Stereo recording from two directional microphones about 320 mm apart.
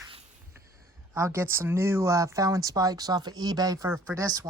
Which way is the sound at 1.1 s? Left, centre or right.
Centre.